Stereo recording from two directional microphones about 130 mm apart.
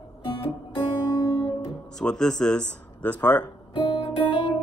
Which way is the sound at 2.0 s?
5° left (ahead or behind).